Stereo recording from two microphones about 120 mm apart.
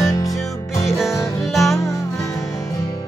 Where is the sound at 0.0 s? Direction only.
30° left (ahead or behind).